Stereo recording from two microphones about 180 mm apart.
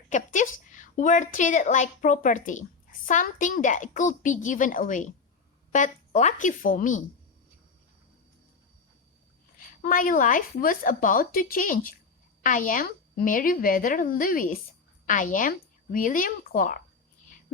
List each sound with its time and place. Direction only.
0.1 s a woman's voice: 45° left (ahead or behind)
9.6 s a woman's voice: 50° left (ahead or behind)